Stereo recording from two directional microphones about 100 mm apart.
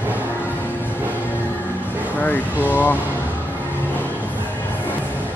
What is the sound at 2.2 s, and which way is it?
Speech, 15° left (ahead or behind).